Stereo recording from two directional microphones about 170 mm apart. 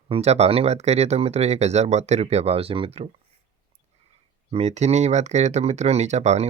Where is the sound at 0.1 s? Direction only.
40° right (ahead or behind).